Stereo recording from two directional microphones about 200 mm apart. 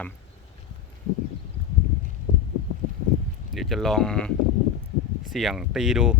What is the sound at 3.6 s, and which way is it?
Speech, centre (ahead or behind).